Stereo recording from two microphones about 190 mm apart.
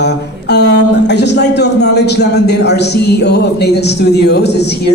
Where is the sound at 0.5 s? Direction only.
65° left (ahead or behind).